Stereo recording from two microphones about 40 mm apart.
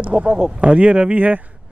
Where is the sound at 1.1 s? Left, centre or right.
Right.